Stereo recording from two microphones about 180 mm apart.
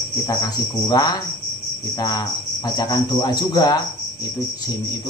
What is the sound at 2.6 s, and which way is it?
Speech, 20° left (ahead or behind).